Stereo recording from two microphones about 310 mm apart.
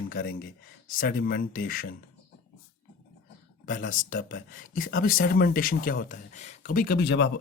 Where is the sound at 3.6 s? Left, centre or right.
Left.